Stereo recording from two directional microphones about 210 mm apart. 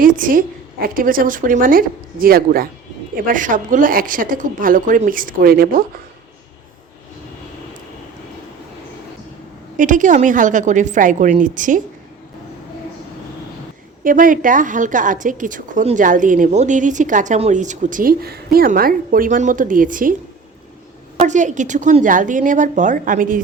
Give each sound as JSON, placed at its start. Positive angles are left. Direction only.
{"t": 0.0, "sound": "a woman's voice", "side_deg": -40}
{"t": 9.7, "sound": "a woman's voice", "side_deg": -40}
{"t": 14.0, "sound": "a woman's voice", "side_deg": -40}
{"t": 21.2, "sound": "a woman's voice", "side_deg": -35}